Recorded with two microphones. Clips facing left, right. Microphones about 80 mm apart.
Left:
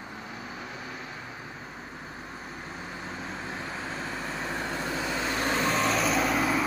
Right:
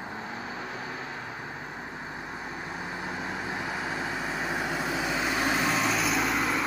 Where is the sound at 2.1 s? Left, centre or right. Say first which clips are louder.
Right 4 dB; right.